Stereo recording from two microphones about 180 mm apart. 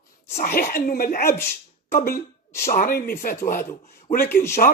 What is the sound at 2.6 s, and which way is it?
Speech, 50° left (ahead or behind).